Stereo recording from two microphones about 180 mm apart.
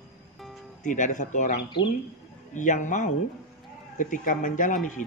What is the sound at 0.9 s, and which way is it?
Speech, 45° left (ahead or behind).